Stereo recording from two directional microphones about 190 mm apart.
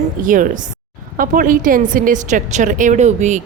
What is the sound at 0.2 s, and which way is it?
A woman's voice, 45° right (ahead or behind).